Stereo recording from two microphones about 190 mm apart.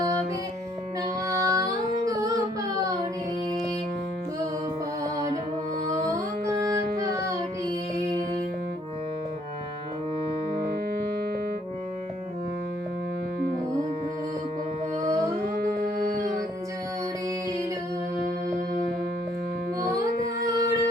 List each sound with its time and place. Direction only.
1.3 s carnatic music: 20° right (ahead or behind)
2.0 s a sound: 20° right (ahead or behind)
7.0 s child singing: 15° right (ahead or behind)
15.0 s music: 15° right (ahead or behind)
15.4 s music: 50° right (ahead or behind)
20.1 s music: 55° left (ahead or behind)